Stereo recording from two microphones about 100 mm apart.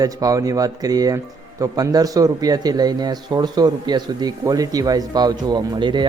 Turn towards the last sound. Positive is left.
turn(degrees=-50)  # may be behind; listen again after turning